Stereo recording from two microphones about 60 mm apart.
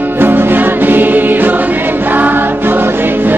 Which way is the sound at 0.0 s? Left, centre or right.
Right.